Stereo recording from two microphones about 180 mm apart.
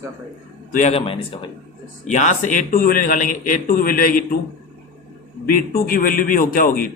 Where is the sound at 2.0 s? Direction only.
45° left (ahead or behind).